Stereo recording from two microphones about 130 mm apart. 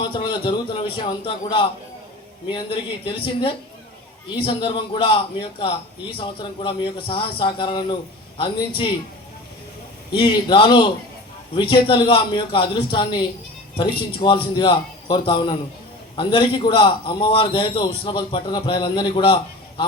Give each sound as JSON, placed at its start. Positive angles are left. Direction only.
{"t": 0.0, "sound": "a man's voice", "side_deg": 35}
{"t": 10.2, "sound": "a man's voice", "side_deg": 40}